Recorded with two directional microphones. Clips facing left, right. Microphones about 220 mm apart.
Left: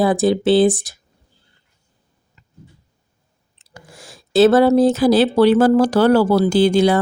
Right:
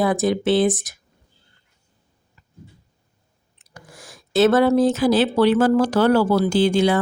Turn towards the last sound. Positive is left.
turn(degrees=40)  # may be behind; listen again after turning